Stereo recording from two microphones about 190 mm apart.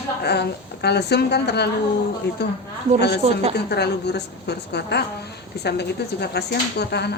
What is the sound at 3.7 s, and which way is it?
Speech, 60° left (ahead or behind).